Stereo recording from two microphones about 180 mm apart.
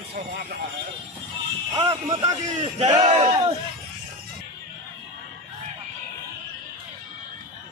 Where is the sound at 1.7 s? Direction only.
20° right (ahead or behind).